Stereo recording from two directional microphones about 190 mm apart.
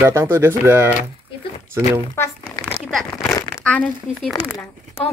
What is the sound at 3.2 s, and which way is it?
Crumpling, 15° left (ahead or behind).